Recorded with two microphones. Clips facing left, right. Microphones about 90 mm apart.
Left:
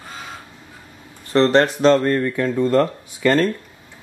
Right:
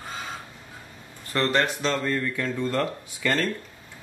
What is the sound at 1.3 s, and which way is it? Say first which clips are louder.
Speech: left 9 dB; 30° left (ahead or behind).